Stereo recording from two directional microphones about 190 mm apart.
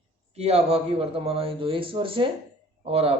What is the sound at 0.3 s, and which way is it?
A man's voice, 35° right (ahead or behind).